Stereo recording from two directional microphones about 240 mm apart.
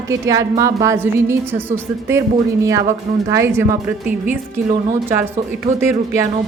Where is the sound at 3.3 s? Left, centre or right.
Centre.